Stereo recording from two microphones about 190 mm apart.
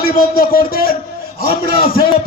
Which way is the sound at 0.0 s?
50° left (ahead or behind).